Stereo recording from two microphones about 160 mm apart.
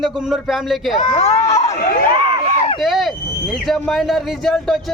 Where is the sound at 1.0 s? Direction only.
40° left (ahead or behind).